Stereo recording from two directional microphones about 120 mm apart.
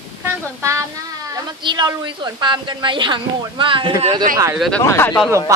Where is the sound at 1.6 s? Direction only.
35° right (ahead or behind).